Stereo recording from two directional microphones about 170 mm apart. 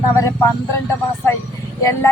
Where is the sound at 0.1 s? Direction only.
20° left (ahead or behind).